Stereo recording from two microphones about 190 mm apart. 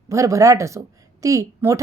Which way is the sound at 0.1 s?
15° right (ahead or behind).